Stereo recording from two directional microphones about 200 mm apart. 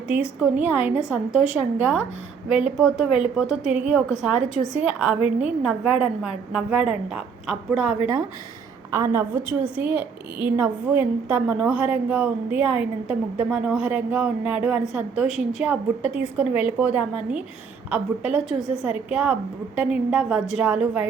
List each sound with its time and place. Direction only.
0.1 s a woman's voice: 5° right (ahead or behind)
8.9 s a woman's voice: 15° right (ahead or behind)